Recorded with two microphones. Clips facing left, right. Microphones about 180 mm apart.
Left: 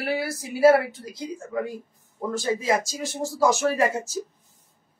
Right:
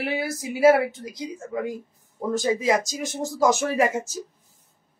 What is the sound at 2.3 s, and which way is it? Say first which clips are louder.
A woman's voice: right 2 dB; 20° right (ahead or behind).